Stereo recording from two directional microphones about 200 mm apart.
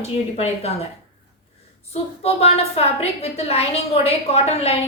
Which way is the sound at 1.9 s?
30° left (ahead or behind).